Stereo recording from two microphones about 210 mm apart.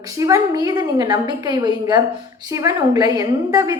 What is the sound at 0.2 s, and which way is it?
A woman's voice, 15° right (ahead or behind).